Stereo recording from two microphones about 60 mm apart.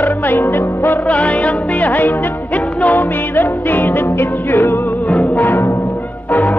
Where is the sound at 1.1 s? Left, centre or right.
Left.